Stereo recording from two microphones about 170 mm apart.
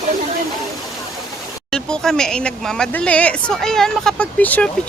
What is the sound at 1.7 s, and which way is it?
Speech, 5° left (ahead or behind).